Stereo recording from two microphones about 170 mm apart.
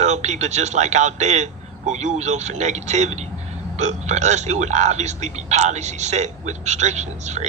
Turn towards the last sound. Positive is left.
turn(degrees=-40)  # may be behind; listen again after turning